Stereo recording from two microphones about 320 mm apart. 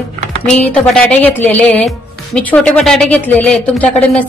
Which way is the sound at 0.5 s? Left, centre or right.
Centre.